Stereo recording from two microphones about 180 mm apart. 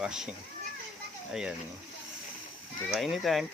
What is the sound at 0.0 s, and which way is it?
Speech, 5° right (ahead or behind).